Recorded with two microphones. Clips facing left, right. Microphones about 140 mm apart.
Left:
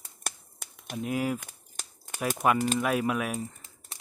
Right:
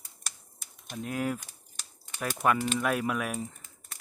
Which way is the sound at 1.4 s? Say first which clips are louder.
Left 5 dB; 50° left (ahead or behind).